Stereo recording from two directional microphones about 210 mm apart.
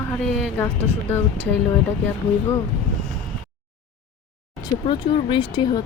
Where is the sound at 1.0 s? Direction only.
10° left (ahead or behind).